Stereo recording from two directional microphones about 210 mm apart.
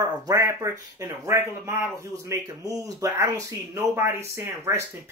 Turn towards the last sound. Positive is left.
turn(degrees=-15)  # may be behind; listen again after turning